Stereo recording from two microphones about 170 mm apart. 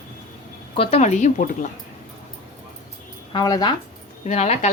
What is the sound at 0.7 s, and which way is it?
Speech, 35° left (ahead or behind).